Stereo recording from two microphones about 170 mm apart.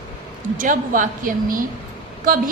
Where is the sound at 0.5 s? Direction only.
50° right (ahead or behind).